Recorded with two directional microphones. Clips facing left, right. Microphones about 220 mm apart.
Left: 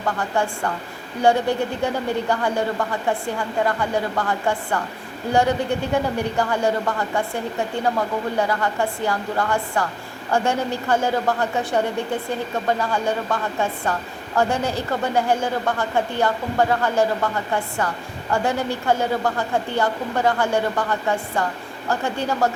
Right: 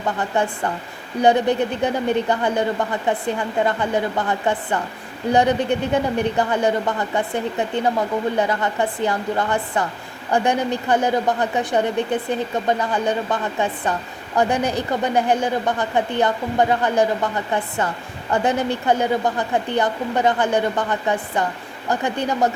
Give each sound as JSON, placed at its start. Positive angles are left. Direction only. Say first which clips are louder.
{"t": 0.2, "sound": "a woman's voice", "louder": "right 1 dB", "side_deg": -20}